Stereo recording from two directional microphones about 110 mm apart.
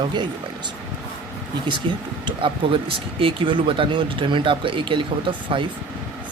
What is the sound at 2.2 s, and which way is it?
Speech, 50° right (ahead or behind).